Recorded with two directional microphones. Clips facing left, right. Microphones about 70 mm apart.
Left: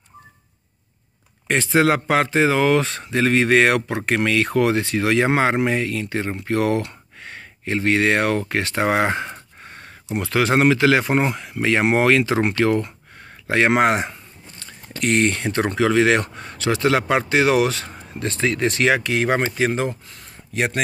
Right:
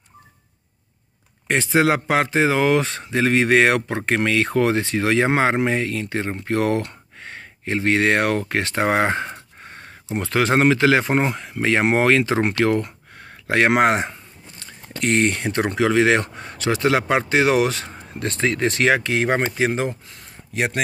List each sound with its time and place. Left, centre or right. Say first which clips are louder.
1.5 s speech: left 1 dB; centre; by 12.5 s right
12.8 s a sound: even; right
13.8 s speech: even; right
15.2 s speech: even; right
18.2 s speech: even; right
18.5 s speech: even; right
20.5 s speech: left 1 dB; centre